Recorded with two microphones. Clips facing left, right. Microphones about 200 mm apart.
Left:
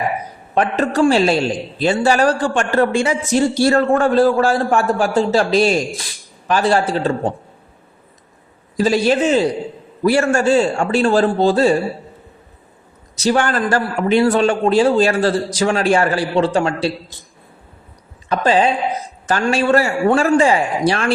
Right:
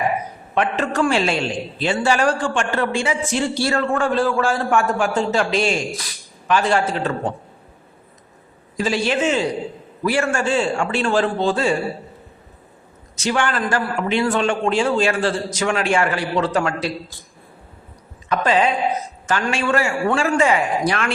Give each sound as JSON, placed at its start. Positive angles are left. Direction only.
{"t": 0.5, "sound": "a man's voice", "side_deg": 35}
{"t": 8.7, "sound": "a man's voice", "side_deg": 40}
{"t": 13.1, "sound": "a man's voice", "side_deg": 35}
{"t": 18.3, "sound": "a man's voice", "side_deg": 30}